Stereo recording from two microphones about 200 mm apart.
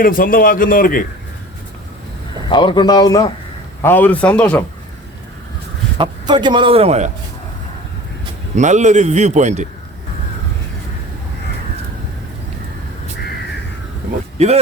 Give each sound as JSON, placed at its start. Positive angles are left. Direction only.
{"t": 0.0, "sound": "a man's voice", "side_deg": 45}
{"t": 2.5, "sound": "a man's voice", "side_deg": 25}
{"t": 6.0, "sound": "a man's voice", "side_deg": -20}
{"t": 8.5, "sound": "a man's voice", "side_deg": -35}
{"t": 14.3, "sound": "speech", "side_deg": -30}